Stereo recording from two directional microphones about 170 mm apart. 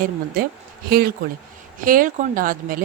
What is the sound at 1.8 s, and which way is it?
Speech, 55° right (ahead or behind).